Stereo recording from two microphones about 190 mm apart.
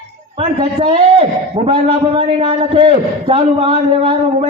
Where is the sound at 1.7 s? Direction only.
30° right (ahead or behind).